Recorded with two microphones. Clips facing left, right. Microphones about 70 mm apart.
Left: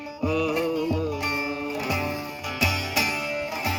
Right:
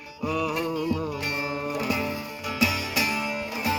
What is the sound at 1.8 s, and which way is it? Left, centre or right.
Music, centre.